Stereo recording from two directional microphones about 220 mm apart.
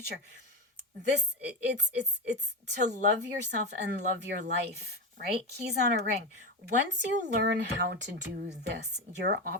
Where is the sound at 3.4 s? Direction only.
50° right (ahead or behind).